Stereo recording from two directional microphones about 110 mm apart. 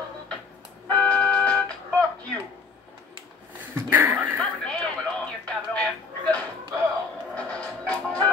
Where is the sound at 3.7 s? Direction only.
15° right (ahead or behind).